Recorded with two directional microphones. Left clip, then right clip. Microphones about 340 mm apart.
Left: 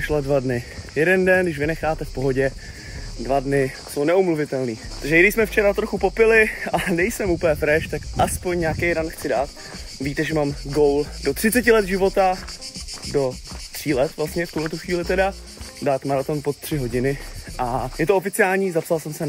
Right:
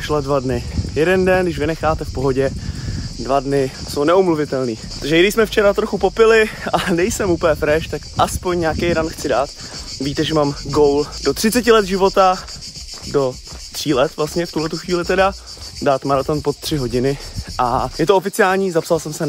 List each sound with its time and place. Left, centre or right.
0.0 s speech: centre
13.8 s speech: centre